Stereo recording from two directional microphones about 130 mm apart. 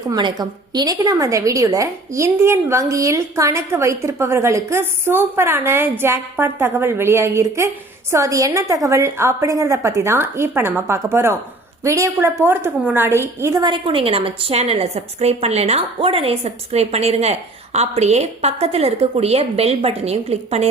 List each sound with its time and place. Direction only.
0.1 s a woman's voice: 35° right (ahead or behind)
13.7 s a woman's voice: 40° right (ahead or behind)